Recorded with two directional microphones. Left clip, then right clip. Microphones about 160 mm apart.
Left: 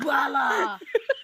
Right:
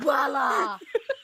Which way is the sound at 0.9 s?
Centre (ahead or behind).